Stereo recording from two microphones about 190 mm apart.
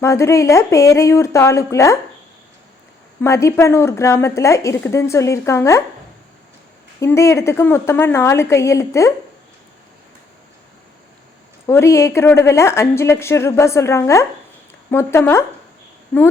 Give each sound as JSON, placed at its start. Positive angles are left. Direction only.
{"t": 0.0, "sound": "a woman's voice", "side_deg": 15}
{"t": 3.2, "sound": "a woman's voice", "side_deg": 15}
{"t": 7.0, "sound": "a woman's voice", "side_deg": 15}
{"t": 11.6, "sound": "a woman's voice", "side_deg": 15}